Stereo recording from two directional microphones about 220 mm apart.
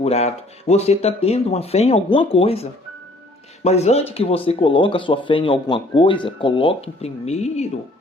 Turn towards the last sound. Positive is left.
turn(degrees=30)  # may be behind; listen again after turning